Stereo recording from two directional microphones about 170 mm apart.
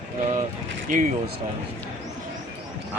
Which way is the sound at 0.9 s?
50° right (ahead or behind).